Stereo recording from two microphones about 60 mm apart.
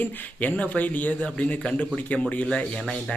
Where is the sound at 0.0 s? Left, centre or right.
Left.